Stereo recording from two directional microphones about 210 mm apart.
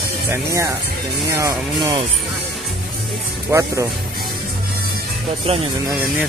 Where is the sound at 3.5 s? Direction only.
15° right (ahead or behind).